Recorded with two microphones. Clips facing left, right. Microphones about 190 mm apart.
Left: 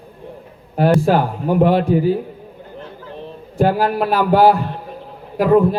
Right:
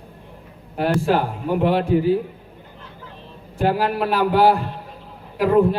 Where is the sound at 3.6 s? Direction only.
40° left (ahead or behind).